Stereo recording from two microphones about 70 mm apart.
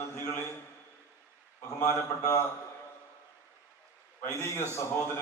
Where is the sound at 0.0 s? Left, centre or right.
Left.